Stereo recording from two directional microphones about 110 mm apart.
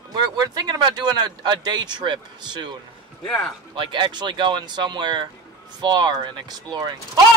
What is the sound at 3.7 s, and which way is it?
Speech, 45° right (ahead or behind).